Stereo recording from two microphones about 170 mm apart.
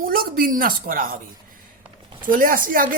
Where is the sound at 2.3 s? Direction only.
55° right (ahead or behind).